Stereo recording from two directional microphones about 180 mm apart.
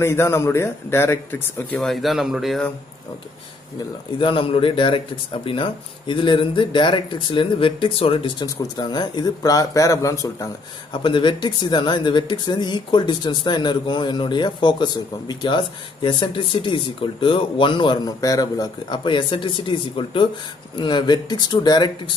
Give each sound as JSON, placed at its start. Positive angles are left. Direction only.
{"t": 0.0, "sound": "speech", "side_deg": 15}
{"t": 1.8, "sound": "speech", "side_deg": 0}
{"t": 4.2, "sound": "speech", "side_deg": 30}